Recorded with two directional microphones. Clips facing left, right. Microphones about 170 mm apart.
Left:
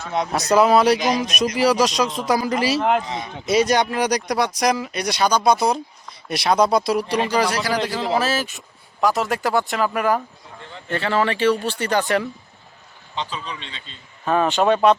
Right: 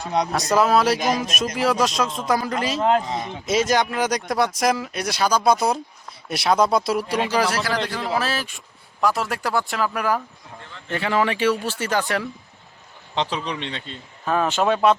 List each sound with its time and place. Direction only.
0.3 s speech: centre (ahead or behind)
10.9 s speech: 10° right (ahead or behind)
13.1 s speech: 80° right; by 14.0 s 60° right (ahead or behind)
14.3 s speech: centre (ahead or behind)